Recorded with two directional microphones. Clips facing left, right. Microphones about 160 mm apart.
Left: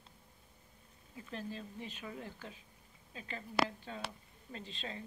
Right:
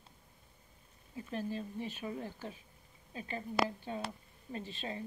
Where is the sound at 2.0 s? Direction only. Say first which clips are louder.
Right 5 dB; 30° right (ahead or behind).